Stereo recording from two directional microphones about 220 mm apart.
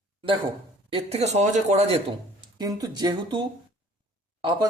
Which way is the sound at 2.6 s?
15° right (ahead or behind).